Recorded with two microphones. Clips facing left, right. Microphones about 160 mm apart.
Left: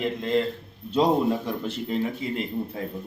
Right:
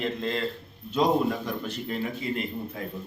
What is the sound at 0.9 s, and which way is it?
A man's voice, 30° left (ahead or behind).